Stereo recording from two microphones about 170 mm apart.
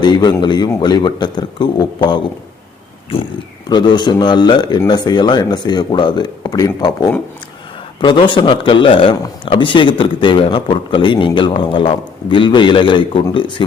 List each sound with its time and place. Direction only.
0.0 s a man's voice: 25° left (ahead or behind)
3.7 s a man's voice: 25° left (ahead or behind)